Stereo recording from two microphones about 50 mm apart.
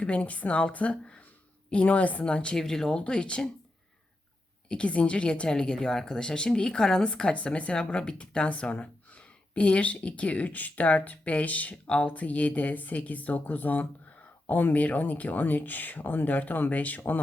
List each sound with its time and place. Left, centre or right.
0.0 s a woman's voice: left
2.6 s speech: centre
4.7 s a woman's voice: left